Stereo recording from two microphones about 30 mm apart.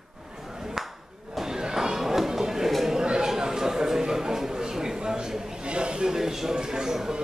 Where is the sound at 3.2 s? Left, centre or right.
Centre.